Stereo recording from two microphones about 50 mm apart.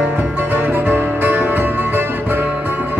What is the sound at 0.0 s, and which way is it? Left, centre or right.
Music, right.